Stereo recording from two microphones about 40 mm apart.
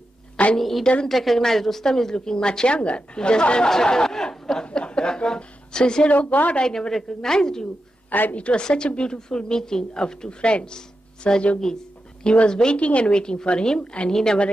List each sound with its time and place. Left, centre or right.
0.6 s a woman's voice: centre
4.6 s a sound: left
6.0 s a woman's voice: left
6.6 s a woman's voice: centre
8.1 s a woman's voice: left
8.4 s a woman's voice: left
11.6 s a woman's voice: centre
12.7 s a woman's voice: left
14.1 s speech: centre